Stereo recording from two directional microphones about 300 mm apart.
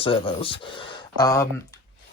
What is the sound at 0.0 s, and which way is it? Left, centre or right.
Speech, centre.